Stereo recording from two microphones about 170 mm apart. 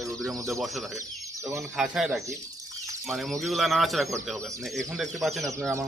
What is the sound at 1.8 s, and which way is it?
Speech, centre (ahead or behind).